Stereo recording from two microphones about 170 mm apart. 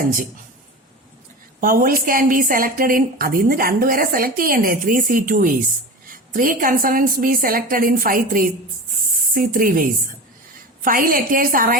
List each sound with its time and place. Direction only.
0.0 s a woman's voice: 55° right (ahead or behind)
1.6 s a woman's voice: 55° right (ahead or behind)